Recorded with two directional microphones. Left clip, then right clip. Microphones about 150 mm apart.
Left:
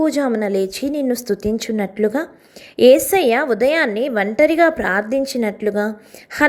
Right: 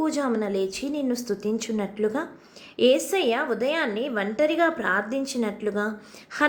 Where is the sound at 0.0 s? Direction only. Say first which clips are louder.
Left 7 dB; 35° left (ahead or behind).